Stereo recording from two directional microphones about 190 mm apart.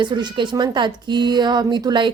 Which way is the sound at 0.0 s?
25° right (ahead or behind).